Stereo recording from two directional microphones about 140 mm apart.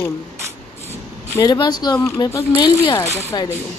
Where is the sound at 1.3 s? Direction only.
30° left (ahead or behind).